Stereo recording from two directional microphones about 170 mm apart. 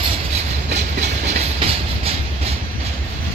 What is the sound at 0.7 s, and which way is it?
Train, 40° right (ahead or behind).